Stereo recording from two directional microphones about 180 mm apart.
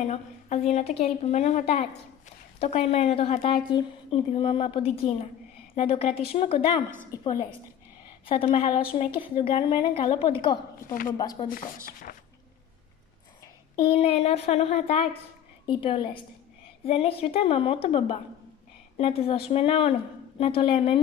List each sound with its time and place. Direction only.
0.0 s a woman's voice: 40° left (ahead or behind); by 11.4 s 20° left (ahead or behind)
11.4 s speech: 50° left (ahead or behind)
13.7 s a woman's voice: 30° left (ahead or behind)